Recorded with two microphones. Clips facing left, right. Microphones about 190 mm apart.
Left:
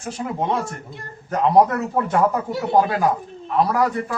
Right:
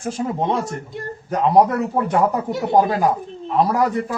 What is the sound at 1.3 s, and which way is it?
A man's voice, 10° right (ahead or behind).